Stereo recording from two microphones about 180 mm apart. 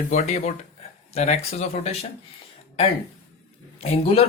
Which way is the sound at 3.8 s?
35° left (ahead or behind).